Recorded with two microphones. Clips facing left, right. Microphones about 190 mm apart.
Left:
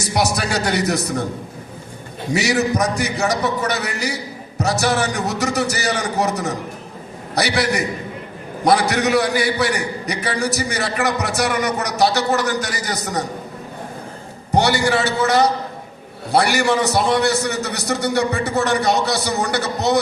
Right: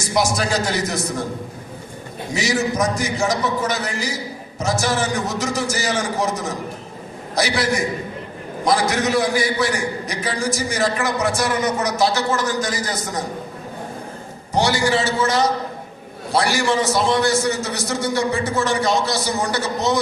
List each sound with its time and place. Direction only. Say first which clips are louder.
0.0 s a man's voice: even; 65° left (ahead or behind)
2.3 s a man's voice: left 3 dB; 65° left (ahead or behind)
14.5 s a man's voice: left 2 dB; 65° left (ahead or behind)